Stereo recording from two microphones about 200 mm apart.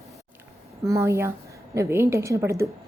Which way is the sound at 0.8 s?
15° right (ahead or behind).